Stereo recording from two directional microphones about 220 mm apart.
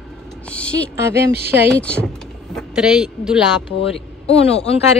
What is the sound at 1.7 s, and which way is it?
A woman's voice, 5° left (ahead or behind).